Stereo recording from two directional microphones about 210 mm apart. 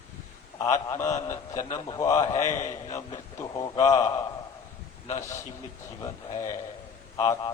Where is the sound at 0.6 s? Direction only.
15° left (ahead or behind).